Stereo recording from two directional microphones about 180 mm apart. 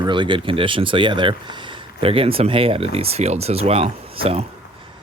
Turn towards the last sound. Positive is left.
turn(degrees=-30)  # may be behind; listen again after turning